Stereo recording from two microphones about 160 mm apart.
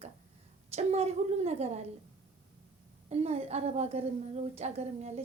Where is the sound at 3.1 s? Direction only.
40° right (ahead or behind).